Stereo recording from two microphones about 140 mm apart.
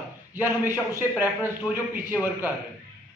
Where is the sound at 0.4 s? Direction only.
15° right (ahead or behind).